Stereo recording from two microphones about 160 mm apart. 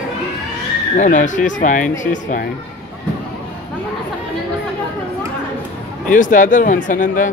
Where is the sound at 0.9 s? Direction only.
50° left (ahead or behind).